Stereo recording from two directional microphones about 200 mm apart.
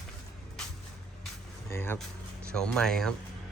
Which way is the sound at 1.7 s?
10° left (ahead or behind).